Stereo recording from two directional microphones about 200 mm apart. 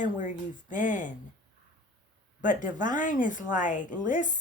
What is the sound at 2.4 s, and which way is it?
A woman's voice, 40° left (ahead or behind).